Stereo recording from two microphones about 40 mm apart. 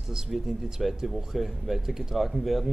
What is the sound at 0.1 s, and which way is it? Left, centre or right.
Speech, centre.